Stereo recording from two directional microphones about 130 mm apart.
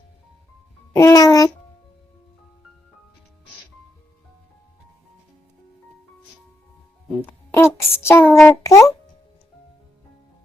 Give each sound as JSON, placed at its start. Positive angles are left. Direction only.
{"t": 0.9, "sound": "a child's voice", "side_deg": 25}
{"t": 7.2, "sound": "music", "side_deg": 15}
{"t": 8.0, "sound": "a sound", "side_deg": 15}
{"t": 8.6, "sound": "a child's voice", "side_deg": 25}